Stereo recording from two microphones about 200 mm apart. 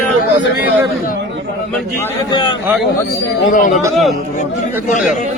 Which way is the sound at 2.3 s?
20° left (ahead or behind).